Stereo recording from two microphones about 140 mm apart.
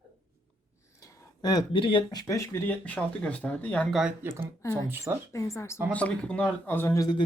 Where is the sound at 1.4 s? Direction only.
30° left (ahead or behind).